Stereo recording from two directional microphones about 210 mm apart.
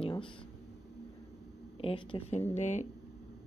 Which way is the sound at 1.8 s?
25° left (ahead or behind).